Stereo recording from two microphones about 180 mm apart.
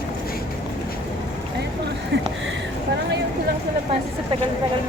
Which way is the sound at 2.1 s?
70° right (ahead or behind).